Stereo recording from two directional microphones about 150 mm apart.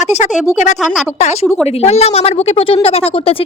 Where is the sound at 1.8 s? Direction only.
45° left (ahead or behind).